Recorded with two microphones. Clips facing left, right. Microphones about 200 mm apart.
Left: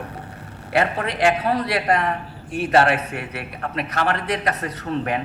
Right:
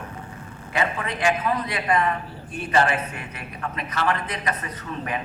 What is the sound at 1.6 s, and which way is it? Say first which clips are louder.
A man's voice: left 2 dB; 70° left (ahead or behind).